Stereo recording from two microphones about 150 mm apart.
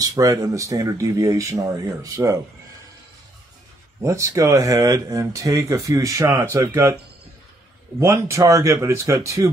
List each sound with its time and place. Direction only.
0.0 s speech: 25° right (ahead or behind)
4.0 s speech: 20° right (ahead or behind)
8.0 s speech: 20° right (ahead or behind)